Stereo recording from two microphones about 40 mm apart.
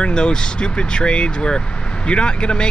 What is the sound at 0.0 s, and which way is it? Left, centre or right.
Speech, left.